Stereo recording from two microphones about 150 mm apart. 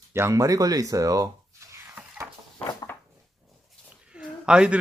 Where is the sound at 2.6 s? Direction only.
15° left (ahead or behind).